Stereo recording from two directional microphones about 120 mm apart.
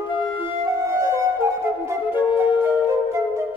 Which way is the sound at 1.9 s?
20° right (ahead or behind).